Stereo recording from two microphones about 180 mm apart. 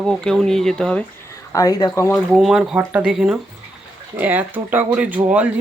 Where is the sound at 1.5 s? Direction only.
20° left (ahead or behind).